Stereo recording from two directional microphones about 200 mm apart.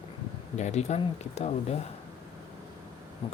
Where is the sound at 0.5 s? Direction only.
35° left (ahead or behind).